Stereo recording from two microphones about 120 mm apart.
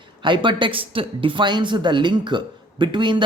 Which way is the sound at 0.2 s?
40° right (ahead or behind).